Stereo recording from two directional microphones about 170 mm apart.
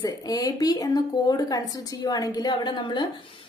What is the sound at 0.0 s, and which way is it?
Speech, 20° left (ahead or behind).